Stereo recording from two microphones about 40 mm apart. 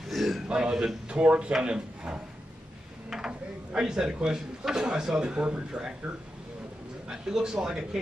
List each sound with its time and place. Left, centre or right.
0.1 s a sound: centre
0.5 s a man's voice: centre
7.1 s speech: centre